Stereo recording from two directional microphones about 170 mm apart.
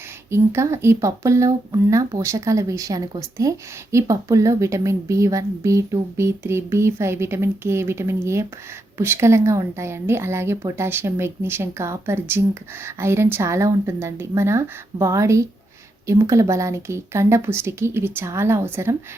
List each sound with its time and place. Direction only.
0.3 s speech: 15° right (ahead or behind)